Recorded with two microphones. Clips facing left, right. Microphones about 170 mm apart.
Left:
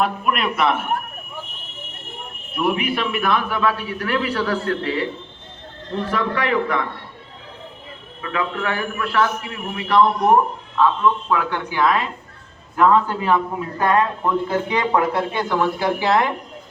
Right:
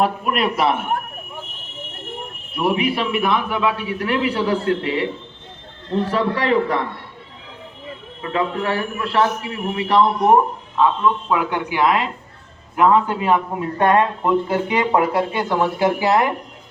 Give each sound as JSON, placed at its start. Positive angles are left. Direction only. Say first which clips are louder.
{"t": 0.0, "sound": "a man's voice", "louder": "right 2 dB", "side_deg": -35}
{"t": 2.6, "sound": "a man's voice", "louder": "right 2 dB", "side_deg": -30}
{"t": 6.1, "sound": "a man's voice", "louder": "right 1 dB", "side_deg": -30}
{"t": 8.2, "sound": "a man's voice", "louder": "right 2 dB", "side_deg": -30}
{"t": 11.3, "sound": "a man's voice", "louder": "right 1 dB", "side_deg": -15}
{"t": 14.5, "sound": "speech", "louder": "right 2 dB", "side_deg": -10}
{"t": 16.0, "sound": "speech", "louder": "left 1 dB", "side_deg": -5}